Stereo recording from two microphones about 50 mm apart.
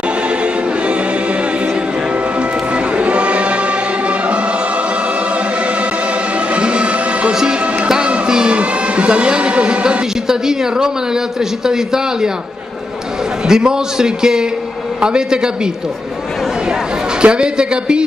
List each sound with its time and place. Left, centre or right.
2.7 s music: right
6.5 s music: right
11.6 s a man's voice: centre
13.5 s a man's voice: centre
17.2 s speech: centre